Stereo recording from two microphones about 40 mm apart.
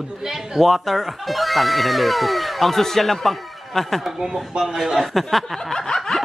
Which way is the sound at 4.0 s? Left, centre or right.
Centre.